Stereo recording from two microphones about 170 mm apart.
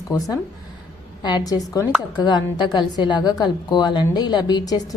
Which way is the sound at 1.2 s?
25° left (ahead or behind).